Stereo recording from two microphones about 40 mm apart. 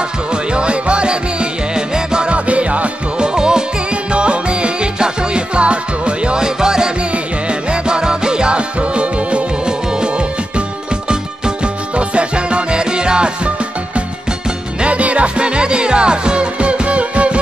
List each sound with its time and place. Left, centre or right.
0.3 s music: right
3.3 s music: centre
14.8 s music: right